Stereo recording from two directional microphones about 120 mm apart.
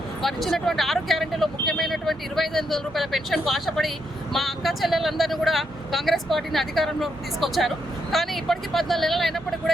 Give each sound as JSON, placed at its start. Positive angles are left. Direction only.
{"t": 0.2, "sound": "speech", "side_deg": 0}